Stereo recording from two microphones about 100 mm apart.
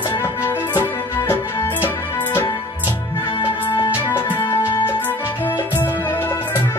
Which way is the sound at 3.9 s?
20° left (ahead or behind).